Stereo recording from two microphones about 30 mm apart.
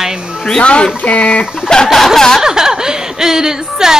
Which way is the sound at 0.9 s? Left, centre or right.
Left.